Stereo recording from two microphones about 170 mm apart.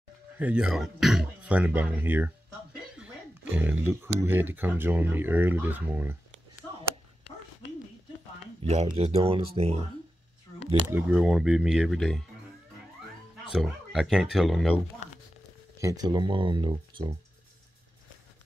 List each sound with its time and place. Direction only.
0.4 s throat clearing: 5° right (ahead or behind)
3.5 s speech: 10° right (ahead or behind)
8.6 s speech: 40° right (ahead or behind)
10.9 s speech: 10° right (ahead or behind)
13.5 s speech: centre (ahead or behind)
15.8 s speech: 20° right (ahead or behind)